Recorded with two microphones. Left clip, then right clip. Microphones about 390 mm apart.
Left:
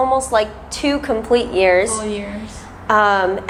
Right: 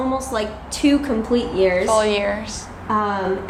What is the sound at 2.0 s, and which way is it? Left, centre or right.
Speech, right.